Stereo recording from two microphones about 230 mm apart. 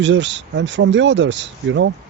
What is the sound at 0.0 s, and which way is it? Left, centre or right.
Speech, right.